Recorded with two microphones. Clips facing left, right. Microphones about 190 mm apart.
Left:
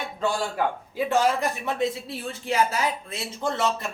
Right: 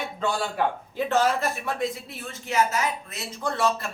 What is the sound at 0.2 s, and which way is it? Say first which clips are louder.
A man's voice: left 1 dB; 10° left (ahead or behind).